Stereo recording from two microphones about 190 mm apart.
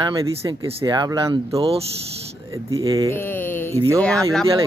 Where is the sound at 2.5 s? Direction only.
15° right (ahead or behind).